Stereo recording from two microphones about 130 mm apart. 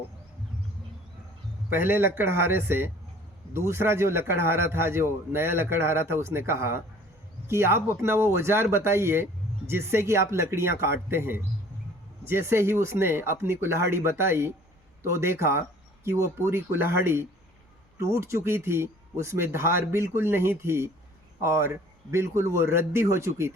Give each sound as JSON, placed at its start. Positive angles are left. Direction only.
{"t": 2.1, "sound": "a man's voice", "side_deg": -20}